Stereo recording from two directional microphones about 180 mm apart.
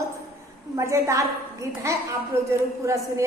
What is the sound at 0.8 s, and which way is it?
A woman's voice, 15° right (ahead or behind).